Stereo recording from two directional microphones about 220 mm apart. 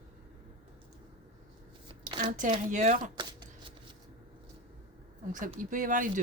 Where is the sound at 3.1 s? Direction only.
20° right (ahead or behind).